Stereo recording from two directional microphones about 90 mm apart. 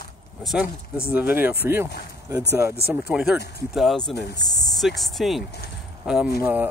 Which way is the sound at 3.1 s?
5° right (ahead or behind).